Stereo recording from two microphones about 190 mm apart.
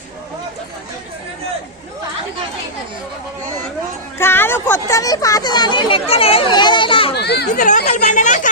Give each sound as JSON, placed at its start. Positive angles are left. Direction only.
{"t": 4.2, "sound": "speech", "side_deg": 10}
{"t": 7.2, "sound": "speech", "side_deg": 60}